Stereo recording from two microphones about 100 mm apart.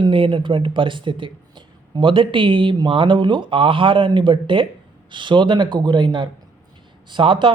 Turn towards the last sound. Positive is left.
turn(degrees=-60)  # may be behind; listen again after turning